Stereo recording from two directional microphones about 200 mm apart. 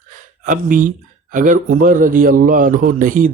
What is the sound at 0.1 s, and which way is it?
A man's voice, 40° right (ahead or behind).